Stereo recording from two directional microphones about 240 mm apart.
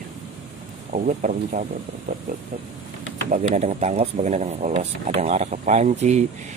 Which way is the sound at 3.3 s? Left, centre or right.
Right.